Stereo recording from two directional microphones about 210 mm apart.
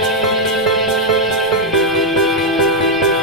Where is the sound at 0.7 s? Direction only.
Centre (ahead or behind).